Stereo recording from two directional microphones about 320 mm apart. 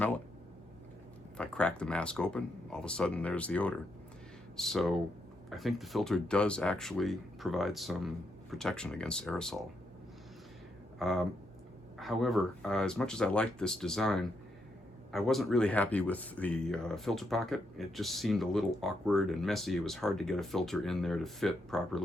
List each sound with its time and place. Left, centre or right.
1.4 s speech: centre
11.0 s speech: centre